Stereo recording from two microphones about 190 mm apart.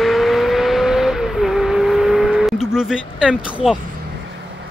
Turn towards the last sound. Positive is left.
turn(degrees=-5)  # may be behind; listen again after turning